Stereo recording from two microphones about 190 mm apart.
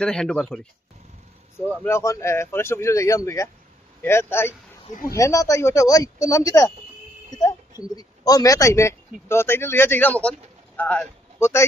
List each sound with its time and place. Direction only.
0.0 s speech: 5° left (ahead or behind)
1.8 s speech: 15° left (ahead or behind)